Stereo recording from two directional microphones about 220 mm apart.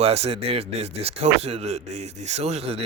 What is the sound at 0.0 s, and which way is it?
Speech, 30° right (ahead or behind).